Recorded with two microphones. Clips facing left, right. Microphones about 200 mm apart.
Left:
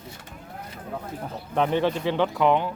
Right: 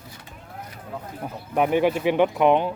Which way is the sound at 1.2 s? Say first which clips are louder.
Right 2 dB; 10° right (ahead or behind).